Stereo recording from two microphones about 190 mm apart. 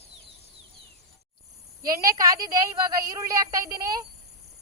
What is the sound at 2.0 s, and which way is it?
Speech, 20° right (ahead or behind).